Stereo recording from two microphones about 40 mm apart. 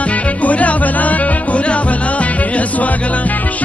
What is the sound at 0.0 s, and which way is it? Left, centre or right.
Music, left.